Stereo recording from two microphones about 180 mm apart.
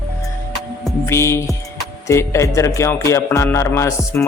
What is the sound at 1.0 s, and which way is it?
A man's voice, 15° left (ahead or behind).